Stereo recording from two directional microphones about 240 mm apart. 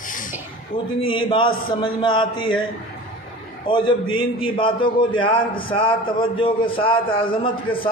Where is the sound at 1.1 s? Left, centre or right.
Left.